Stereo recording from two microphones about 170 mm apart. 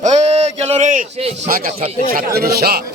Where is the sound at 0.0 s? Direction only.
40° right (ahead or behind).